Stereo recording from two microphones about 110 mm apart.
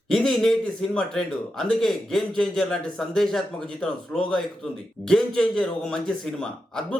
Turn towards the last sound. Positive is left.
turn(degrees=5)  # may be behind; listen again after turning